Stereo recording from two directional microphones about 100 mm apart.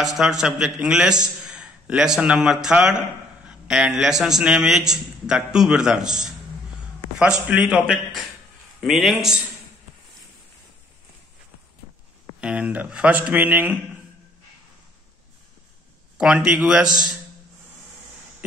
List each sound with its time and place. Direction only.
0.0 s a man's voice: 5° right (ahead or behind)
12.4 s speech: 10° right (ahead or behind)
16.2 s speech: 10° right (ahead or behind)